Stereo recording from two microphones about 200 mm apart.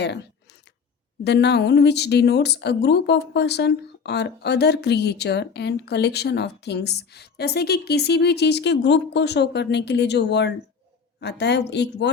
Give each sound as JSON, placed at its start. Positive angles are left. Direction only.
{"t": 0.0, "sound": "speech", "side_deg": 55}